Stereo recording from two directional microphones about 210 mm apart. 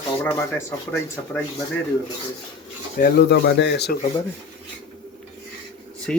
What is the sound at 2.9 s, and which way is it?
Speech, 50° left (ahead or behind).